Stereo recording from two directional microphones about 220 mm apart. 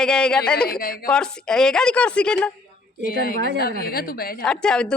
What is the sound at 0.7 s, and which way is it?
Speech, 45° left (ahead or behind).